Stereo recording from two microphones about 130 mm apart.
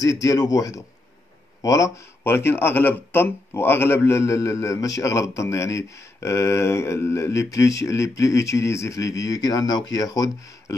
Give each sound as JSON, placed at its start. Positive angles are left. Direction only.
{"t": 0.0, "sound": "speech", "side_deg": 25}